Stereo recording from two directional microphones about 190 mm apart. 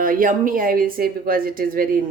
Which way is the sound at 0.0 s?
45° right (ahead or behind).